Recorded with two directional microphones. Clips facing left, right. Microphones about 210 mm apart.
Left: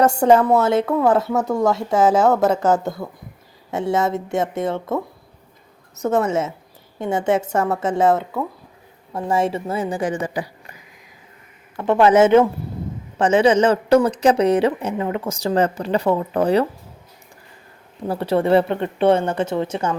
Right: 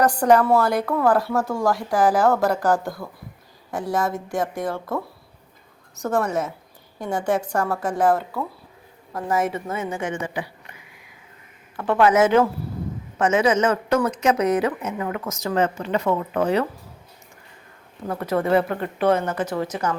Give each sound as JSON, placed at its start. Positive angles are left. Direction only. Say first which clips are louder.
{"t": 0.0, "sound": "a woman's voice", "louder": "left 3 dB", "side_deg": 25}
{"t": 11.8, "sound": "a woman's voice", "louder": "left 4 dB", "side_deg": 25}
{"t": 18.1, "sound": "speech", "louder": "left 4 dB", "side_deg": 30}